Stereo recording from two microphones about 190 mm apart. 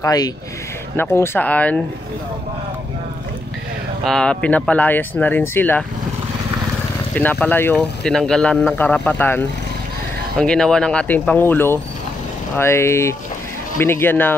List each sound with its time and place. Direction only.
0.0 s speech: 20° left (ahead or behind)
4.0 s speech: 5° left (ahead or behind)
7.2 s speech: 10° left (ahead or behind)